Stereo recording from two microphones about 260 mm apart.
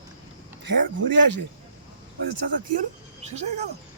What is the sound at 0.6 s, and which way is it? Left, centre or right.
Speech, right.